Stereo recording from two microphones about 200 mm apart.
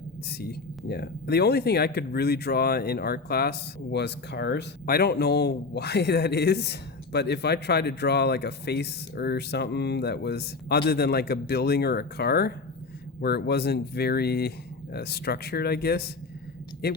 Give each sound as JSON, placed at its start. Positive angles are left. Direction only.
{"t": 0.3, "sound": "speech", "side_deg": 50}